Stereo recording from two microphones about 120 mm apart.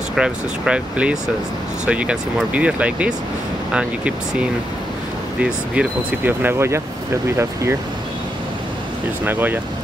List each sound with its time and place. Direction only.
0.1 s speech: 5° right (ahead or behind)
5.4 s speech: 15° right (ahead or behind)
9.2 s speech: 15° right (ahead or behind)